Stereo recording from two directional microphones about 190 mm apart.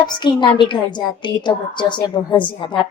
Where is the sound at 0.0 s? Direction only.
25° left (ahead or behind).